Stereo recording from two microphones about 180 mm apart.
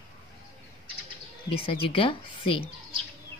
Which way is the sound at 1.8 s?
30° left (ahead or behind).